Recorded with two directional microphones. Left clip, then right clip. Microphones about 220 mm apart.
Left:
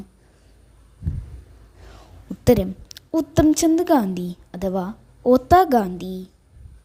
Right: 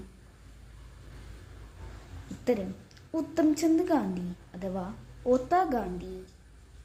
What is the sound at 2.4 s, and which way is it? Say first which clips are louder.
A woman's voice: left 12 dB; 45° left (ahead or behind).